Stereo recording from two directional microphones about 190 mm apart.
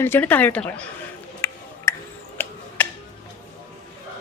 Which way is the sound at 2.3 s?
10° left (ahead or behind).